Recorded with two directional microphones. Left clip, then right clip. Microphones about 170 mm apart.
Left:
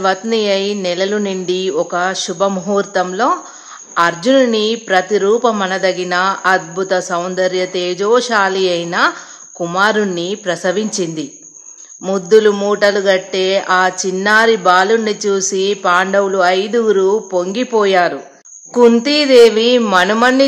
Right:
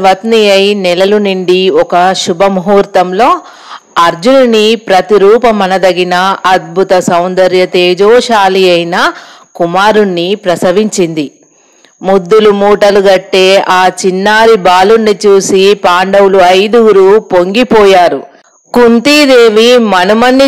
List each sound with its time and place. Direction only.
0.0 s a woman's voice: 40° right (ahead or behind)
12.0 s a man's voice: 25° right (ahead or behind)
12.5 s a woman's voice: 35° right (ahead or behind)